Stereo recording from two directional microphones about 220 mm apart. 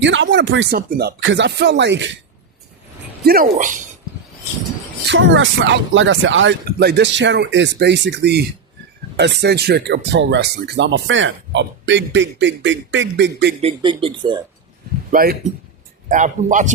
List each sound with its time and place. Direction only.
0.0 s speech: 55° right (ahead or behind)
0.8 s speech: 45° right (ahead or behind)
3.2 s a man's voice: 40° right (ahead or behind)
5.0 s speech: 55° right (ahead or behind)
13.6 s speech: 25° right (ahead or behind)
15.1 s a man's voice: 45° right (ahead or behind)